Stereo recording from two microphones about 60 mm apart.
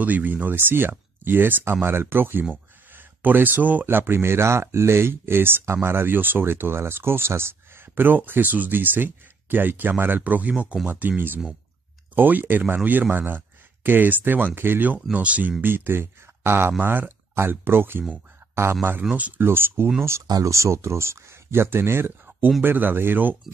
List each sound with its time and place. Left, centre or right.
0.0 s speech: right
2.5 s a sound: right
3.8 s speech: right
15.1 s speech: right
15.6 s speech: right
18.5 s a sound: right
18.8 s speech: right
19.4 s speech: right
20.3 s speech: right